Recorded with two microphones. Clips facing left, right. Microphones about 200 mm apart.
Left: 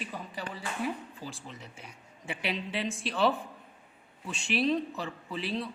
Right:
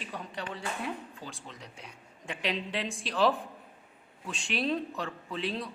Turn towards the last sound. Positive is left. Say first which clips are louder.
# even
turn(degrees=0)  # may be behind; listen again after turning